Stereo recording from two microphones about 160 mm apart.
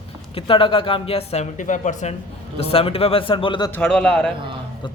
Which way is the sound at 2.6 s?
35° left (ahead or behind).